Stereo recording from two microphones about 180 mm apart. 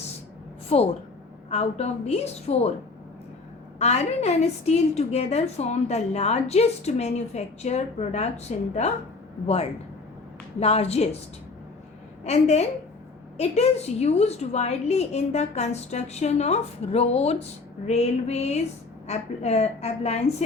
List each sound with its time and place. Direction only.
0.7 s a woman's voice: 35° left (ahead or behind)
3.8 s a woman's voice: 35° left (ahead or behind)
10.6 s a woman's voice: 35° left (ahead or behind)
12.2 s a woman's voice: 35° left (ahead or behind)